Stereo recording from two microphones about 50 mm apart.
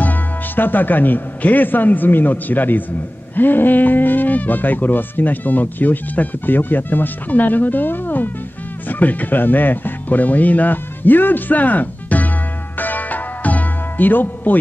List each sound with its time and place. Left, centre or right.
0.0 s a man's voice: left
12.7 s music: left